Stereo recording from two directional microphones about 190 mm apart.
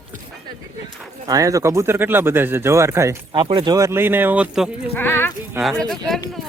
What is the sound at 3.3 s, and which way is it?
Speech, 25° right (ahead or behind).